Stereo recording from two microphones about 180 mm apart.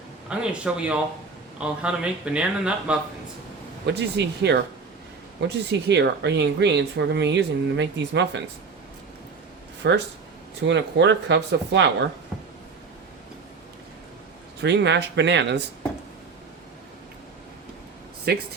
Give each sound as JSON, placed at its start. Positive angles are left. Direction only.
{"t": 0.3, "sound": "speech", "side_deg": -5}
{"t": 3.8, "sound": "speech", "side_deg": -70}
{"t": 9.8, "sound": "speech", "side_deg": -70}
{"t": 10.7, "sound": "speech", "side_deg": -80}
{"t": 14.6, "sound": "speech", "side_deg": -70}
{"t": 18.3, "sound": "speech", "side_deg": -60}